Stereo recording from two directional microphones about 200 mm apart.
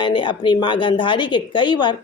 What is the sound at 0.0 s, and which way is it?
A woman's voice, 25° left (ahead or behind).